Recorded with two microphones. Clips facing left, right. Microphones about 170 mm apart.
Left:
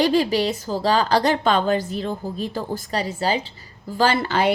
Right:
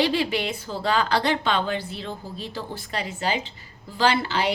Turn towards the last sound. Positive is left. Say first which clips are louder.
# left 3 dB
turn(degrees=50)  # may be behind; listen again after turning